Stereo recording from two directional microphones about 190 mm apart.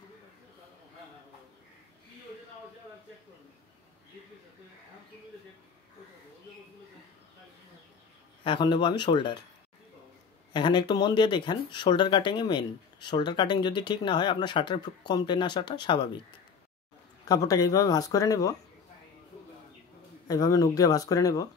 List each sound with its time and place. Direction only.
8.5 s speech: 25° left (ahead or behind)
10.5 s speech: 25° left (ahead or behind)
17.2 s speech: 20° left (ahead or behind)
20.2 s speech: 20° left (ahead or behind)